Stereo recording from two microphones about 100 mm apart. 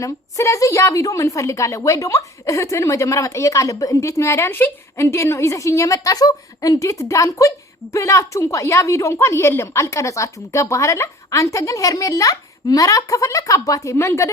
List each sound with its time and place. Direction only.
0.0 s a woman's voice: 30° left (ahead or behind)